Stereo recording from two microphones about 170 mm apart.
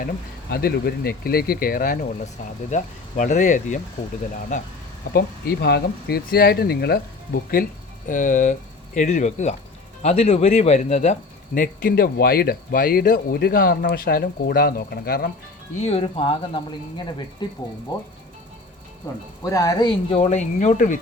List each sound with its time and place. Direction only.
0.5 s speech: 60° left (ahead or behind)
5.1 s speech: 70° left (ahead or behind)
8.0 s speech: 50° left (ahead or behind)
15.7 s speech: 40° left (ahead or behind)
19.4 s speech: 20° left (ahead or behind)
20.1 s speech: 40° left (ahead or behind)